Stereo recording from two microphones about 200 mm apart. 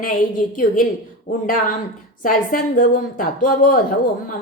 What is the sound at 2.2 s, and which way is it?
A woman's voice, 40° left (ahead or behind).